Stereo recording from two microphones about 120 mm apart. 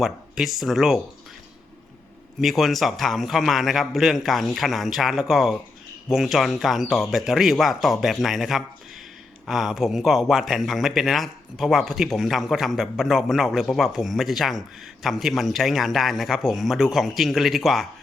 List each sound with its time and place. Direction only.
0.0 s speech: centre (ahead or behind)
2.4 s speech: centre (ahead or behind)